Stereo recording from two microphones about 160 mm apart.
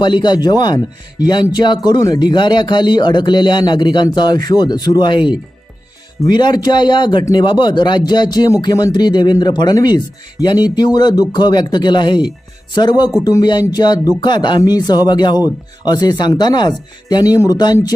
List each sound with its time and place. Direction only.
0.0 s speech: 30° left (ahead or behind)